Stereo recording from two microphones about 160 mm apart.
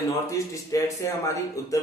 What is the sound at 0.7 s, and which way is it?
Speech, 20° left (ahead or behind).